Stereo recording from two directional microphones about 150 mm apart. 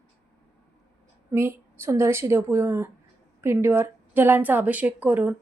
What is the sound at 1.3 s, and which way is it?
Speech, 15° right (ahead or behind).